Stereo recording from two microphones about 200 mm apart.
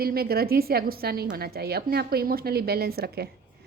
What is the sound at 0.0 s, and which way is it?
A woman's voice, 50° right (ahead or behind).